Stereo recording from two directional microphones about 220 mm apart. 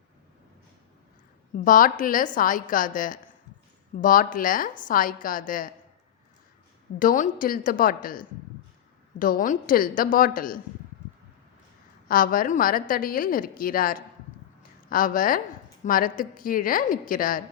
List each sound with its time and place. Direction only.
1.5 s a woman's voice: 40° left (ahead or behind)
7.0 s a woman's voice: 35° left (ahead or behind)
12.0 s a woman's voice: 40° left (ahead or behind)